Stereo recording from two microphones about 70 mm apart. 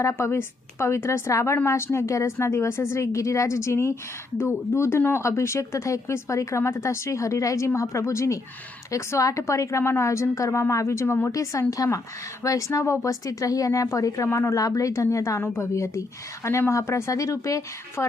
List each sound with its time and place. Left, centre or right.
0.0 s a woman's voice: left
11.7 s speech: left
15.4 s a woman's voice: left
15.7 s speech: left